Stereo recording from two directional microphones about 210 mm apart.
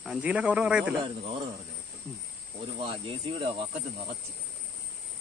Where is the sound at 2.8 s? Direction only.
25° right (ahead or behind).